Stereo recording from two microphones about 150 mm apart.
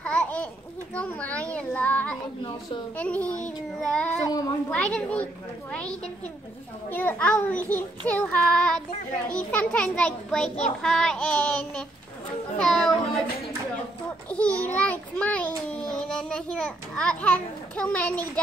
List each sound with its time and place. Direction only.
0.0 s a sound: 10° left (ahead or behind)
0.9 s child singing: 10° left (ahead or behind)
3.0 s a child's voice: 10° left (ahead or behind)
4.3 s a child's voice: 25° left (ahead or behind)
4.6 s a child's voice: 5° left (ahead or behind)
10.8 s child singing: 5° left (ahead or behind)
14.3 s a child's voice: 10° left (ahead or behind)